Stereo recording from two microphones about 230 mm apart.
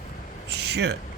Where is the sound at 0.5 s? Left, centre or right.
Right.